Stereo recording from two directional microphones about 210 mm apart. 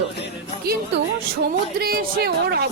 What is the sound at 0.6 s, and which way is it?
A woman's voice, 50° right (ahead or behind).